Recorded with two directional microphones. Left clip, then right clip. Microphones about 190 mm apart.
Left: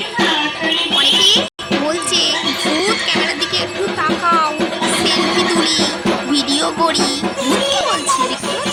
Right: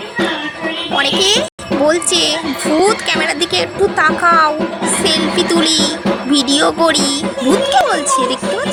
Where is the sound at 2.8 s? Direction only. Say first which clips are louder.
Right 5 dB; 20° right (ahead or behind).